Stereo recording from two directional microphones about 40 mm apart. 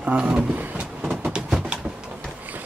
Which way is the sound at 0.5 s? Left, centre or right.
Right.